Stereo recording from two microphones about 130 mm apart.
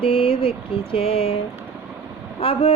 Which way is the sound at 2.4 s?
50° left (ahead or behind).